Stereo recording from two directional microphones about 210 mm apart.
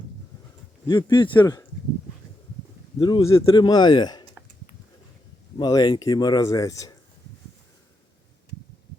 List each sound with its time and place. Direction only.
0.9 s speech: 20° left (ahead or behind)
3.0 s speech: 20° left (ahead or behind)
5.5 s speech: 20° left (ahead or behind)